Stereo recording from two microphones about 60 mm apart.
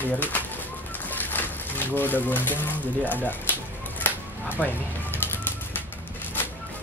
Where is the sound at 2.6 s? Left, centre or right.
Left.